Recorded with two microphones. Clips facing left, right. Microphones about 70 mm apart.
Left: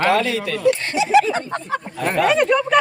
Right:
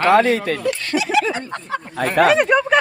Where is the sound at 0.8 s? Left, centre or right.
Left.